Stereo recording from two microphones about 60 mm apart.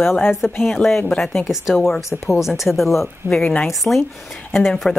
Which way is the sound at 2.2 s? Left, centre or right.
Centre.